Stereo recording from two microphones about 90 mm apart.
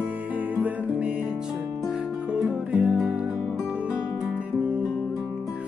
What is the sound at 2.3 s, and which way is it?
Music, 15° right (ahead or behind).